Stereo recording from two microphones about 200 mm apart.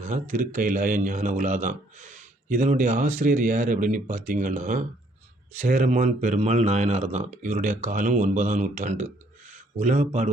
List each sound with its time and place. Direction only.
0.0 s speech: 40° right (ahead or behind)